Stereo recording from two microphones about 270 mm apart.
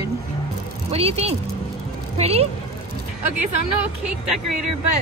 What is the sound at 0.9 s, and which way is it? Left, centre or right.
Speech, right.